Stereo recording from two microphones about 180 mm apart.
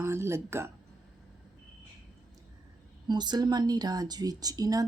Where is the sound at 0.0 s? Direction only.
15° right (ahead or behind).